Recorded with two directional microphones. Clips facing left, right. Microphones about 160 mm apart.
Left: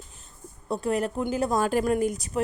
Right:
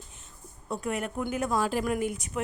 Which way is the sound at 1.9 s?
35° left (ahead or behind).